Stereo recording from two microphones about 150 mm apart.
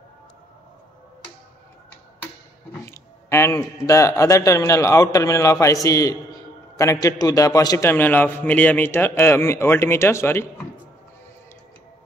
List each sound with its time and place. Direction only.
2.8 s a man's voice: 20° left (ahead or behind)